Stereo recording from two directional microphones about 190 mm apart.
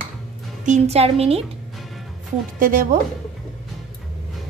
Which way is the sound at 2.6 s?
45° right (ahead or behind).